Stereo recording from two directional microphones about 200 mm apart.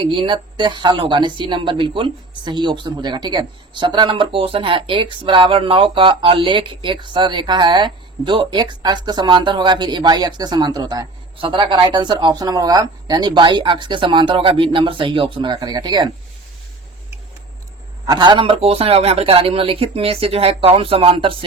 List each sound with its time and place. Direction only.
0.0 s speech: 25° right (ahead or behind)
18.0 s speech: 20° right (ahead or behind)